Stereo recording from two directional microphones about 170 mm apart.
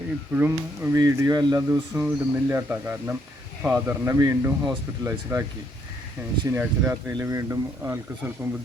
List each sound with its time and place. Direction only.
0.3 s speech: 15° right (ahead or behind)